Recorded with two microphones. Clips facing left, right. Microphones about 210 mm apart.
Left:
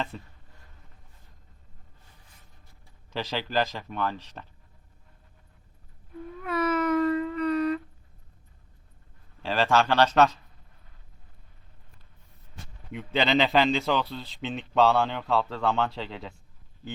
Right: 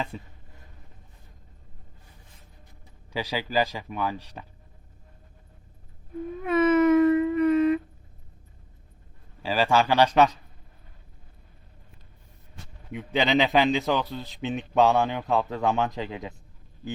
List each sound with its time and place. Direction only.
0.1 s a man's voice: 5° right (ahead or behind)
3.1 s a man's voice: 10° right (ahead or behind)
6.4 s dog: 20° right (ahead or behind)
9.4 s a man's voice: 10° right (ahead or behind)
12.9 s a man's voice: 10° right (ahead or behind)